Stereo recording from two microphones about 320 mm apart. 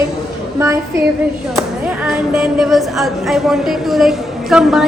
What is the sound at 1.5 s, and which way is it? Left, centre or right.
A woman's voice, centre.